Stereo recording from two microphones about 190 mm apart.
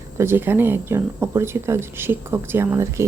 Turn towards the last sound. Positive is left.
turn(degrees=-15)  # may be behind; listen again after turning